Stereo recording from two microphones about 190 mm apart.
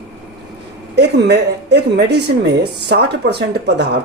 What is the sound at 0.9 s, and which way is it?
Speech, 65° right (ahead or behind).